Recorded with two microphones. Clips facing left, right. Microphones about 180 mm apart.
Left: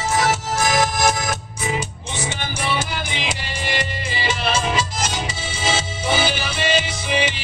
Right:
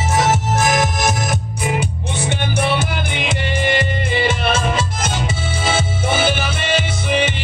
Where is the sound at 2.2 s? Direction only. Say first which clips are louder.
Right 7 dB; 60° right (ahead or behind).